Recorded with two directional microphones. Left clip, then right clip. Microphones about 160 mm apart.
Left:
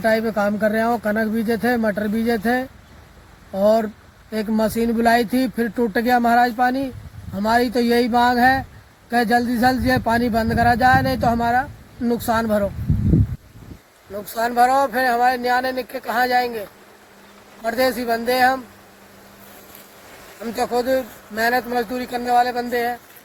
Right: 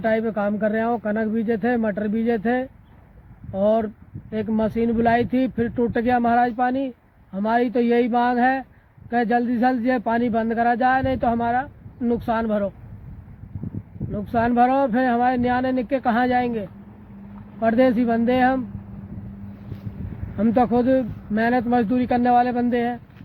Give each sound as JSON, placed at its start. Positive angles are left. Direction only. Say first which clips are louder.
{"t": 0.0, "sound": "speech", "louder": "left 3 dB", "side_deg": 15}
{"t": 14.3, "sound": "speech", "louder": "left 2 dB", "side_deg": 20}
{"t": 17.7, "sound": "speech", "louder": "right 1 dB", "side_deg": 20}
{"t": 20.6, "sound": "speech", "louder": "even", "side_deg": 20}